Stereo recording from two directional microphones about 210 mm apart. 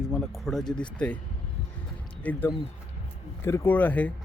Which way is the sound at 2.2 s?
10° left (ahead or behind).